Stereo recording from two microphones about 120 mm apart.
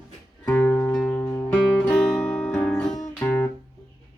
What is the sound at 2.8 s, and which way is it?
Music, 30° left (ahead or behind).